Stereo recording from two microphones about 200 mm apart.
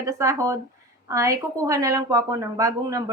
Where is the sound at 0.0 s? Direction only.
15° right (ahead or behind).